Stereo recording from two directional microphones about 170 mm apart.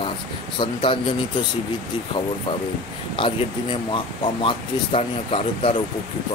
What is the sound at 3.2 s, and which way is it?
Speech, 30° left (ahead or behind).